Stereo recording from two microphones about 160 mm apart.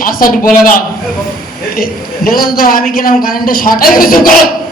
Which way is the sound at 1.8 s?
65° left (ahead or behind).